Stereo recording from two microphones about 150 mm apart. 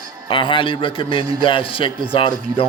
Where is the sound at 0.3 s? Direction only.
35° left (ahead or behind).